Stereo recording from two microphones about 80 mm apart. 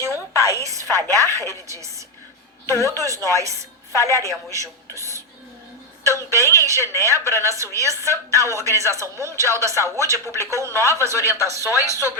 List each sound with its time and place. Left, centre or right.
0.0 s a sound: right
1.1 s a woman's voice: right
11.7 s speech: left